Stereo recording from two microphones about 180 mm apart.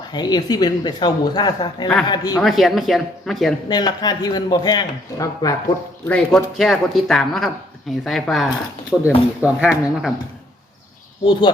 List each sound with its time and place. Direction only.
0.1 s a man's voice: 25° left (ahead or behind)
2.4 s speech: centre (ahead or behind)
3.7 s a man's voice: 25° left (ahead or behind)
6.1 s speech: 5° left (ahead or behind)
11.3 s a man's voice: 25° left (ahead or behind)